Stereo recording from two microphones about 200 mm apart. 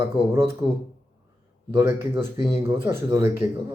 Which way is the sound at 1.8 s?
10° right (ahead or behind).